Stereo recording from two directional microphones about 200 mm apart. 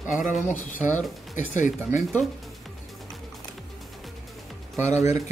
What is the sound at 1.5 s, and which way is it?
Speech, 40° left (ahead or behind).